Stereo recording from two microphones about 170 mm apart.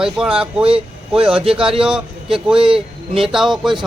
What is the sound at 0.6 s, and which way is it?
Speech, 35° right (ahead or behind).